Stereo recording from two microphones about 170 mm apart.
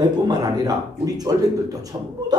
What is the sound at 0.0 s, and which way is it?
Speech, 25° right (ahead or behind).